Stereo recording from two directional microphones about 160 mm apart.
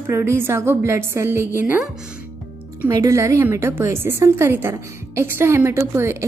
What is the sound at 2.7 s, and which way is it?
A woman's voice, 15° right (ahead or behind).